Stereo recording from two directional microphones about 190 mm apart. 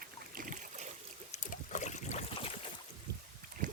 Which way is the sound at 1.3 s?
40° left (ahead or behind).